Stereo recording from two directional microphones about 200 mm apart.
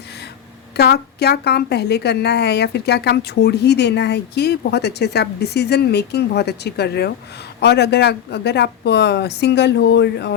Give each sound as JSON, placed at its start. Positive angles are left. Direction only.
{"t": 0.8, "sound": "a woman's voice", "side_deg": 55}